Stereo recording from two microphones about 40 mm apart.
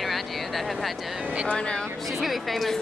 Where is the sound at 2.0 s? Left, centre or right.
Centre.